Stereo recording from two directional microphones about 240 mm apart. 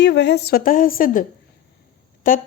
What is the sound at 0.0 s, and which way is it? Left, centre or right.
A woman's voice, left.